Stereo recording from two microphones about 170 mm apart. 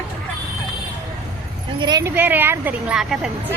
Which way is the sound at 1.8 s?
25° right (ahead or behind).